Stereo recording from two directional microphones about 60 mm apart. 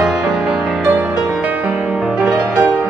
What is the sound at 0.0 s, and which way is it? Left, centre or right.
Music, centre.